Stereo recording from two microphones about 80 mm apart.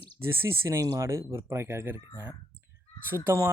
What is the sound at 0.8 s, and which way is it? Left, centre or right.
Speech, right.